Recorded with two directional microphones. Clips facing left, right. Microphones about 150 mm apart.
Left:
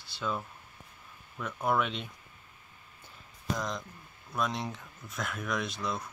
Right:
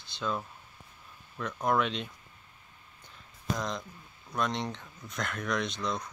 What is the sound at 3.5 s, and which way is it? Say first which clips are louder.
Speech: right 1 dB; centre (ahead or behind).